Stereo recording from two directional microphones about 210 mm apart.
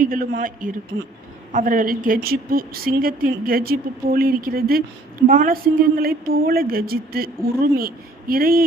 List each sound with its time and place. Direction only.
0.0 s a man's voice: 40° right (ahead or behind)